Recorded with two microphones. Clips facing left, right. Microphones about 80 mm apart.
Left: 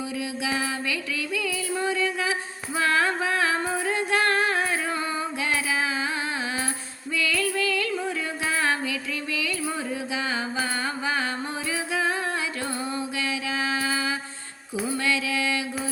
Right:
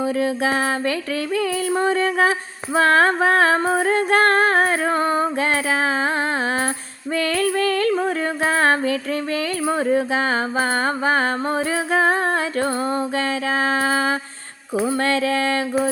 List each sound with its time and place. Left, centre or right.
0.2 s music: right
7.2 s music: right
11.9 s humming: right
13.1 s mantra: right